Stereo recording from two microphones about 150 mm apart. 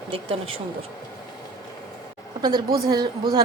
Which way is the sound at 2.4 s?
25° right (ahead or behind).